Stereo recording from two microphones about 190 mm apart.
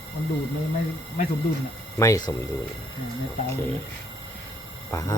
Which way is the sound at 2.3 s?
20° left (ahead or behind).